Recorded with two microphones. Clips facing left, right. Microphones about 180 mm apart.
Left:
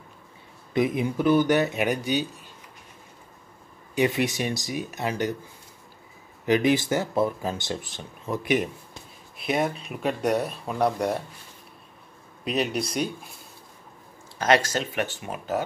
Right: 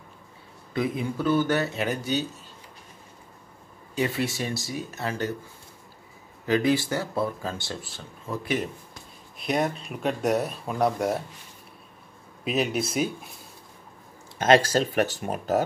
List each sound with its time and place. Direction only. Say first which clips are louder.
0.7 s speech: left 3 dB; 20° left (ahead or behind)
3.9 s speech: left 3 dB; 15° left (ahead or behind)
6.4 s speech: left 1 dB; 20° left (ahead or behind)
9.4 s speech: even; centre (ahead or behind)
12.4 s speech: even; centre (ahead or behind)
14.4 s speech: right 3 dB; 30° right (ahead or behind)